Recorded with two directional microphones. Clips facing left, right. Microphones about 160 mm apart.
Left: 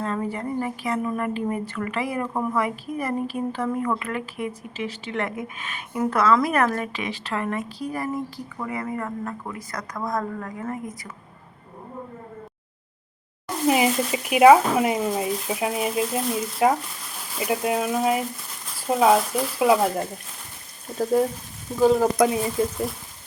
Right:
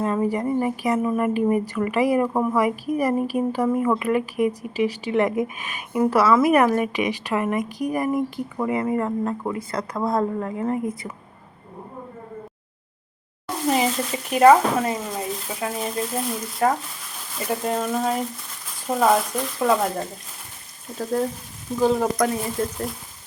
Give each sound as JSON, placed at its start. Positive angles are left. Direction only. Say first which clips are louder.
{"t": 0.0, "sound": "a woman's voice", "louder": "right 5 dB", "side_deg": -15}
{"t": 13.7, "sound": "speech", "louder": "left 2 dB", "side_deg": 10}